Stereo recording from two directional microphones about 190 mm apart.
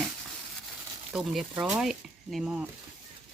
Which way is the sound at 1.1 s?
Centre (ahead or behind).